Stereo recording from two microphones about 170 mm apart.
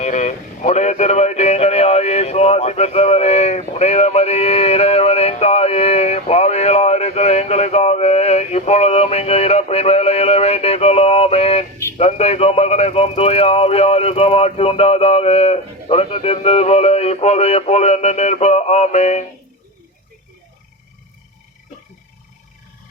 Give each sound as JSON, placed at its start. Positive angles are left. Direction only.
{"t": 0.0, "sound": "music", "side_deg": 45}
{"t": 11.9, "sound": "speech", "side_deg": 40}